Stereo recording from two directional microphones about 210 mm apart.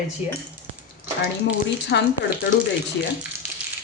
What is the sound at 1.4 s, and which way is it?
Speech, 55° left (ahead or behind).